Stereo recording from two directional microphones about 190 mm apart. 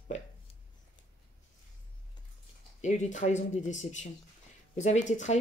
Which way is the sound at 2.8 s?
40° left (ahead or behind).